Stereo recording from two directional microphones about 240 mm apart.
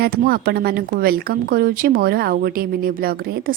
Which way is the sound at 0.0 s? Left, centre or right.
Right.